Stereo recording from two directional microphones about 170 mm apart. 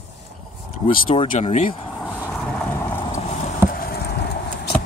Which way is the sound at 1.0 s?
30° left (ahead or behind).